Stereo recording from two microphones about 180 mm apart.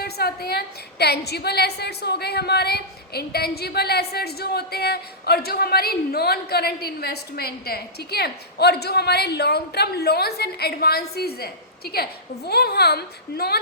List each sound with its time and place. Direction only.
0.0 s a woman's voice: 60° left (ahead or behind)